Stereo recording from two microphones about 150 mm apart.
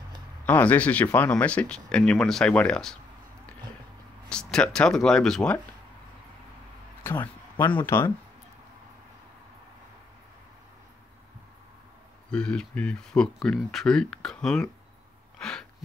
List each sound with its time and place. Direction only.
0.5 s speech: 10° left (ahead or behind)
4.3 s speech: 5° left (ahead or behind)
7.0 s a sound: 15° left (ahead or behind)
7.8 s speech: 20° left (ahead or behind)
12.3 s speech: 5° left (ahead or behind)
15.3 s a sound: 5° left (ahead or behind)